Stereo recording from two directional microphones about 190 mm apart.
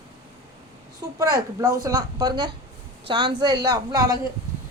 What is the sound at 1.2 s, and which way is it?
A woman's voice, 20° right (ahead or behind).